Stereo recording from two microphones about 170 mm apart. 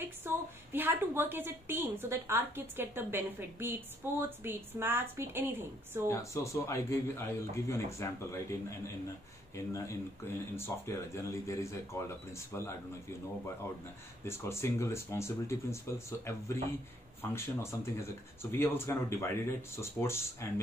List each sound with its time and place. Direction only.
0.0 s a woman's voice: 10° right (ahead or behind)
6.0 s speech: 15° left (ahead or behind)
14.2 s speech: 15° left (ahead or behind)